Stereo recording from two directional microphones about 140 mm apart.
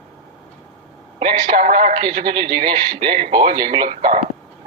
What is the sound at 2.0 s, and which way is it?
A man's voice, 35° right (ahead or behind).